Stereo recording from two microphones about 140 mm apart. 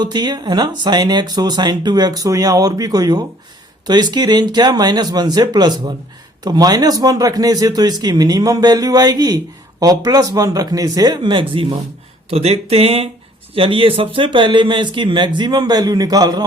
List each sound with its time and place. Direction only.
0.0 s a man's voice: 30° right (ahead or behind)